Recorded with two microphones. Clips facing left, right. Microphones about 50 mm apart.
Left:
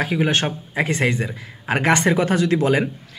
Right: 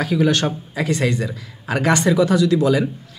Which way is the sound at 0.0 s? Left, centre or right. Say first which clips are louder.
Right 2 dB; left.